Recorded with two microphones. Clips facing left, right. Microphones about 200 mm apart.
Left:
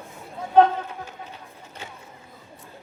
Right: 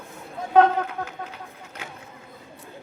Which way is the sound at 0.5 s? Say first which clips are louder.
Even; 75° right (ahead or behind).